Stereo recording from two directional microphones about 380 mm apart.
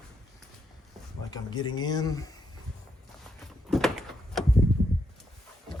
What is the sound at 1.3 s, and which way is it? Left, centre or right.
Speech, centre.